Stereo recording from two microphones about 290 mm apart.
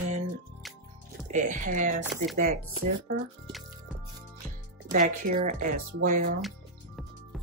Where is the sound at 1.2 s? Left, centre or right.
Right.